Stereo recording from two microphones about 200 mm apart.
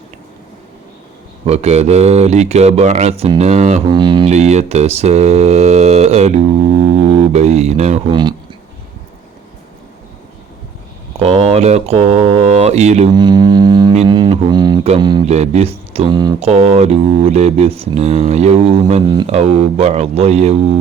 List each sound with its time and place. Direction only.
1.5 s mantra: 35° right (ahead or behind)
3.8 s mantra: 25° right (ahead or behind)
7.3 s mantra: 35° right (ahead or behind)
8.1 s music: 20° right (ahead or behind)
11.2 s mantra: 30° right (ahead or behind)
13.1 s music: 20° right (ahead or behind)
14.8 s mantra: 25° right (ahead or behind)
15.9 s music: 25° right (ahead or behind)
16.5 s mantra: 35° right (ahead or behind)
19.4 s mantra: 35° right (ahead or behind)